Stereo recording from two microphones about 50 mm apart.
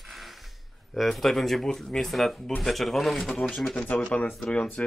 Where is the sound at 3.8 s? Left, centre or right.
Left.